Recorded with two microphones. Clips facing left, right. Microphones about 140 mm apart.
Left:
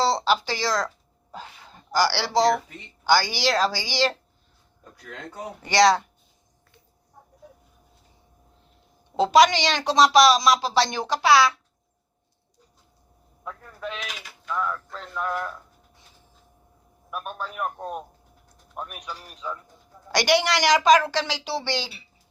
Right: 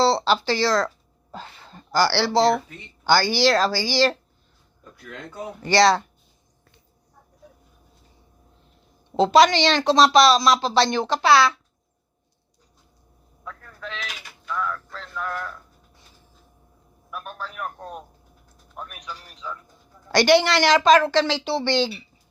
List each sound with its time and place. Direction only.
0.0 s speech: 15° left (ahead or behind)
5.6 s speech: 15° left (ahead or behind)
9.1 s speech: 10° left (ahead or behind)
13.4 s a sound: 15° left (ahead or behind)
14.4 s speech: 20° left (ahead or behind)
17.1 s speech: 20° left (ahead or behind)
18.9 s speech: 10° left (ahead or behind)